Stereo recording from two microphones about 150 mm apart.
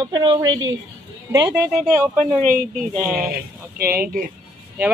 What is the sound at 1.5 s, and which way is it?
Speech, 15° right (ahead or behind).